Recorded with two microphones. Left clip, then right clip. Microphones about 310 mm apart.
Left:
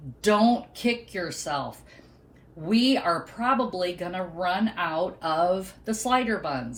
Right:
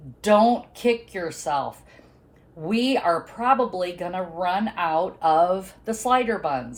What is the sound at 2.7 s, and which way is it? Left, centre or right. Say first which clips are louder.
Speech: right 2 dB; centre.